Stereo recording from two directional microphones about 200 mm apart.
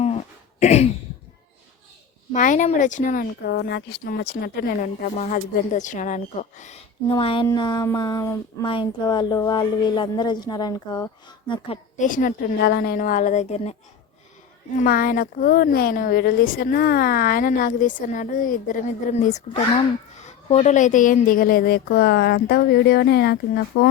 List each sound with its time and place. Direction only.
0.6 s speech: 35° left (ahead or behind)
2.3 s speech: 40° left (ahead or behind)
7.1 s speech: 25° left (ahead or behind)
11.9 s speech: 40° left (ahead or behind)
14.8 s a woman's voice: 45° left (ahead or behind)
20.5 s a woman's voice: 35° left (ahead or behind); by 23.9 s 55° left (ahead or behind)